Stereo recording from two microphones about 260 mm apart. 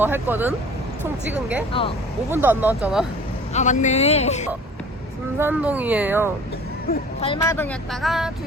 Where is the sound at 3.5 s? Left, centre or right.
Left.